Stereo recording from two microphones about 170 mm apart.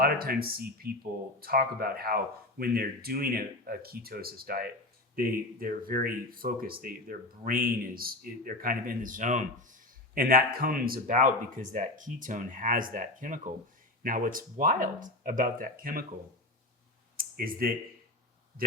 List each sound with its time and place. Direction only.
0.0 s speech: 60° right (ahead or behind)
17.2 s speech: 60° right (ahead or behind)